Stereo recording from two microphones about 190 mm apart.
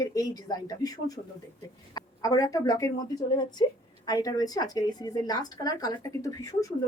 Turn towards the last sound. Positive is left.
turn(degrees=15)  # may be behind; listen again after turning